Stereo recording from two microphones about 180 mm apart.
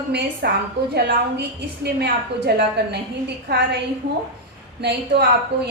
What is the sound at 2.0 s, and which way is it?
A woman's voice, 65° right (ahead or behind).